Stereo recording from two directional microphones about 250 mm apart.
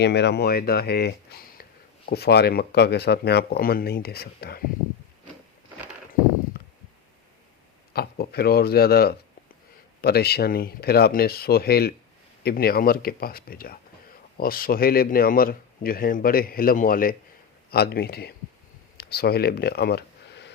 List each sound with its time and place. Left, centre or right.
0.0 s a man's voice: left
7.9 s a man's voice: left